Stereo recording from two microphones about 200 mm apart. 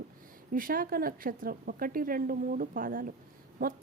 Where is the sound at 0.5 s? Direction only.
45° right (ahead or behind).